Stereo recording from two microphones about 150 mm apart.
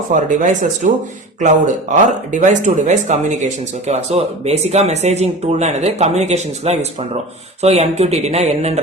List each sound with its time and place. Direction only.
0.1 s speech: 55° right (ahead or behind)